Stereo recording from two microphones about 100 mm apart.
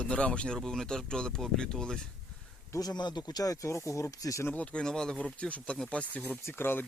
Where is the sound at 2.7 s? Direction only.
40° left (ahead or behind).